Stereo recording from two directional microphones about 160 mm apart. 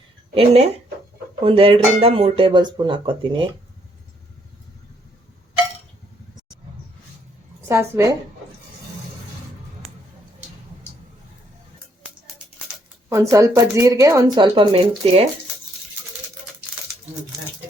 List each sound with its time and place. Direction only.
0.3 s speech: 40° right (ahead or behind)
7.7 s a woman's voice: 15° right (ahead or behind)
13.1 s speech: 20° right (ahead or behind); by 15.3 s 35° right (ahead or behind)